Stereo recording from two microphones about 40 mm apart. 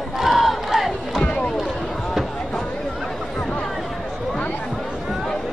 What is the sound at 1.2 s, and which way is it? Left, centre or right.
Rowboat, left.